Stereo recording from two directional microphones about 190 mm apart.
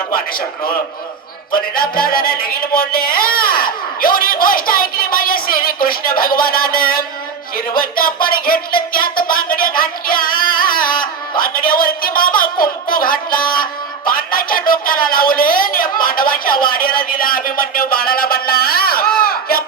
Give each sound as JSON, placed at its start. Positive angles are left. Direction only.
{"t": 1.5, "sound": "speech", "side_deg": 50}